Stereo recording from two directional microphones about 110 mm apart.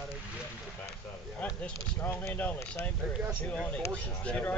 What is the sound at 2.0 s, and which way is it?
Speech, 25° left (ahead or behind).